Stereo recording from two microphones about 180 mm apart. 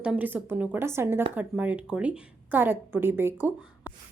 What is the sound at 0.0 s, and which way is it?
A woman's voice, 5° right (ahead or behind).